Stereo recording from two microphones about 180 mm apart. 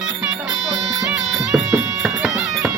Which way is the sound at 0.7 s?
Centre (ahead or behind).